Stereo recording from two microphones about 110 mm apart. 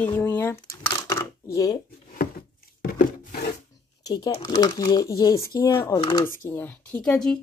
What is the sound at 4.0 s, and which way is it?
Speech, 35° left (ahead or behind).